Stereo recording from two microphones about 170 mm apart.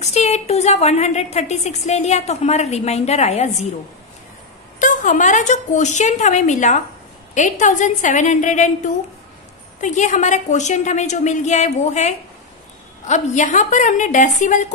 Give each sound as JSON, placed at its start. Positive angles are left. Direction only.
{"t": 0.0, "sound": "a woman's voice", "side_deg": 40}
{"t": 4.7, "sound": "a woman's voice", "side_deg": 50}